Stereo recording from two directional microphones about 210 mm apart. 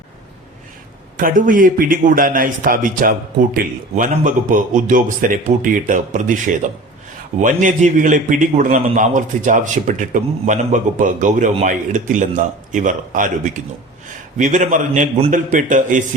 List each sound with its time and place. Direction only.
1.1 s a man's voice: 40° right (ahead or behind)